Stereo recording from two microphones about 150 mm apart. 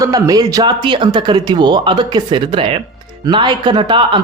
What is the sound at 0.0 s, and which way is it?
Speech, 25° right (ahead or behind).